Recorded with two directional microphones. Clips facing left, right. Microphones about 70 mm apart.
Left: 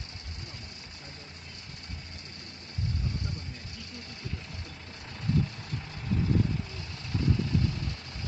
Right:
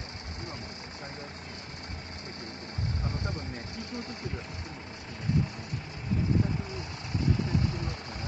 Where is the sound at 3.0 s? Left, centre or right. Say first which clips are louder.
Right 2 dB; right.